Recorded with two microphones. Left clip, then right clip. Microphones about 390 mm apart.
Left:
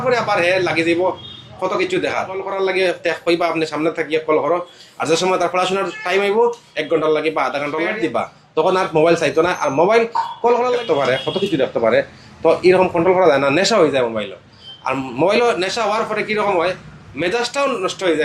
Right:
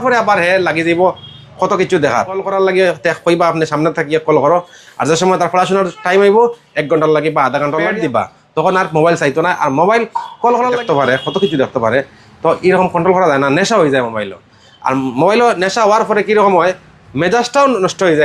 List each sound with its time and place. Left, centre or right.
0.0 s a man's voice: right